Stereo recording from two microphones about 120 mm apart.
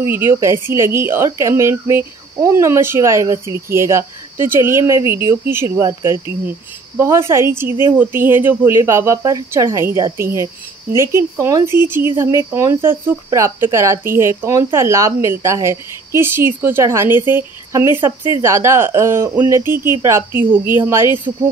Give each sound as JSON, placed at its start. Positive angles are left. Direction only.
{"t": 0.0, "sound": "a woman's voice", "side_deg": -20}